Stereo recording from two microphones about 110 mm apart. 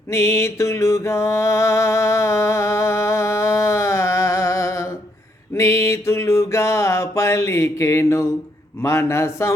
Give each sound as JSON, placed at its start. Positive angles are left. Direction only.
{"t": 0.1, "sound": "mantra", "side_deg": 25}
{"t": 8.8, "sound": "a man's voice", "side_deg": 25}